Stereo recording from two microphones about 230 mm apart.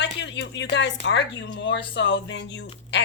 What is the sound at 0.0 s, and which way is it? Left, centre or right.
A woman's voice, left.